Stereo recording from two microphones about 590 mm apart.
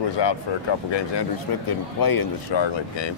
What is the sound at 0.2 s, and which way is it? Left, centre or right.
Speech, left.